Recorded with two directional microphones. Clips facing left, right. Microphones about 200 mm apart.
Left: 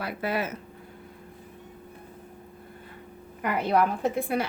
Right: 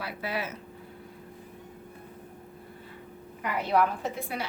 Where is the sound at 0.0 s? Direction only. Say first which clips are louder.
Left 4 dB; 50° left (ahead or behind).